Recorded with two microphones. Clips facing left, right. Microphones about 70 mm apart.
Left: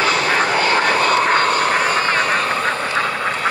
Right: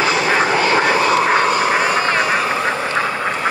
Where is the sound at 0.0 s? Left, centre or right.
Centre.